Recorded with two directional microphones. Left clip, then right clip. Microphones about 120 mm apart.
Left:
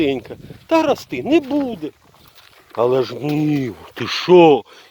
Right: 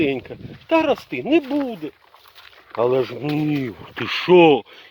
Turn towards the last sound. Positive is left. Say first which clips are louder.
# left 3 dB
turn(degrees=20)  # may be behind; listen again after turning